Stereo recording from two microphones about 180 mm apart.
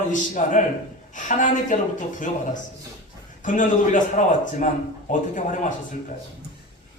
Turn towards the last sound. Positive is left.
turn(degrees=45)  # may be behind; listen again after turning